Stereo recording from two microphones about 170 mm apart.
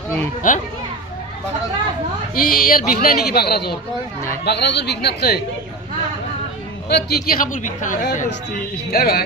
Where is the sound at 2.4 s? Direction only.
55° left (ahead or behind).